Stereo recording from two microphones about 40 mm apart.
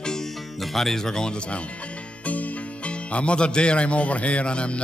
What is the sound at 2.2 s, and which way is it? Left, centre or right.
Speech, left.